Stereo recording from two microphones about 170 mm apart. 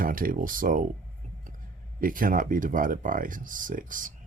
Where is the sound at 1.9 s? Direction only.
55° right (ahead or behind).